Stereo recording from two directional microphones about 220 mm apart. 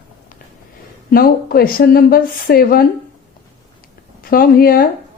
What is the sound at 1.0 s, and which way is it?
A woman's voice, 40° left (ahead or behind).